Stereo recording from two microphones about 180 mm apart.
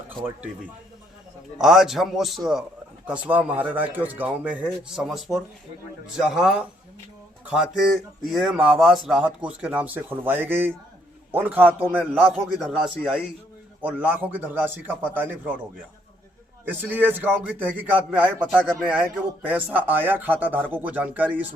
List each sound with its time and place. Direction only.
1.6 s speech: centre (ahead or behind)
16.6 s speech: 10° right (ahead or behind)